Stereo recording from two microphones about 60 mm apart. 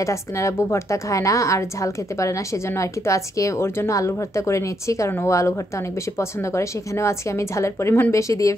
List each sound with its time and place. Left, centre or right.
0.0 s a woman's voice: left